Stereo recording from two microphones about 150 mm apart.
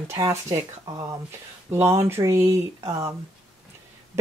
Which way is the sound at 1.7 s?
15° right (ahead or behind).